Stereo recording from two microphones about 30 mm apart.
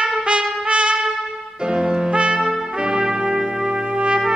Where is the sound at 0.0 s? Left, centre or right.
Right.